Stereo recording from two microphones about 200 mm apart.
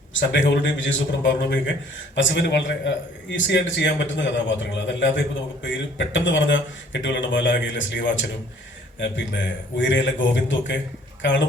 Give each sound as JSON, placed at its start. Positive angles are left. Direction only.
{"t": 0.1, "sound": "speech", "side_deg": 65}